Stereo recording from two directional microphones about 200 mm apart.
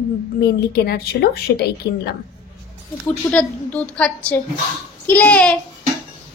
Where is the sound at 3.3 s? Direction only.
5° left (ahead or behind).